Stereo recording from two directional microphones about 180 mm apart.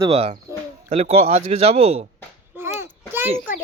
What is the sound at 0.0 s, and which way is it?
Speech, 30° right (ahead or behind).